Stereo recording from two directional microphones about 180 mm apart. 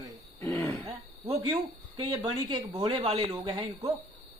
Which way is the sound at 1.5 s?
20° right (ahead or behind).